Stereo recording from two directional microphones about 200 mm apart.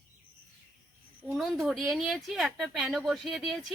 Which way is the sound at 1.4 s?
Centre (ahead or behind).